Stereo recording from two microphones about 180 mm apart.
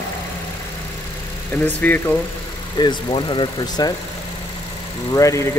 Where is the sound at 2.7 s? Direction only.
25° left (ahead or behind).